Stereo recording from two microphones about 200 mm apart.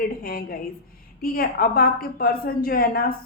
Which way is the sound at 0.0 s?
45° left (ahead or behind).